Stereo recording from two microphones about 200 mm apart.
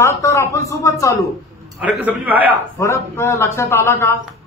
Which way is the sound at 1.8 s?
5° right (ahead or behind).